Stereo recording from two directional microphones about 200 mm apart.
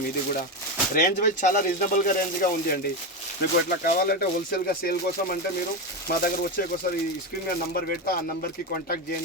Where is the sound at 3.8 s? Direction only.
50° left (ahead or behind).